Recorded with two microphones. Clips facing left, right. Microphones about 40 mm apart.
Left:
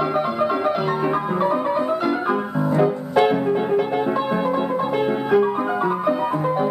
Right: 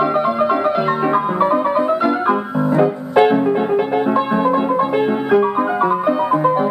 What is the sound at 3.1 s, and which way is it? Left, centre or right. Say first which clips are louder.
Music: right 6 dB; centre.